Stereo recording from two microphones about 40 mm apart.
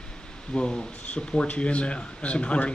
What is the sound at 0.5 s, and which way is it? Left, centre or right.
Speech, left.